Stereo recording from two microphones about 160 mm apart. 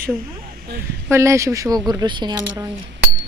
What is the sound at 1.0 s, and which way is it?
Speech, 15° right (ahead or behind).